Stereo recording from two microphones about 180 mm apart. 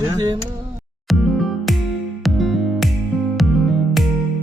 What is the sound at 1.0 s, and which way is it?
Music, centre (ahead or behind).